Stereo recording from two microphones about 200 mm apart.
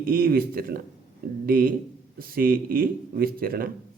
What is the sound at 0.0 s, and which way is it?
Speech, 45° right (ahead or behind).